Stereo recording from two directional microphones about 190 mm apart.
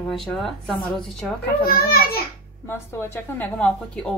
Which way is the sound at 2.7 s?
15° left (ahead or behind).